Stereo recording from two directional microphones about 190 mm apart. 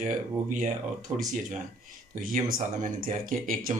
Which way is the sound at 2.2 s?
45° right (ahead or behind).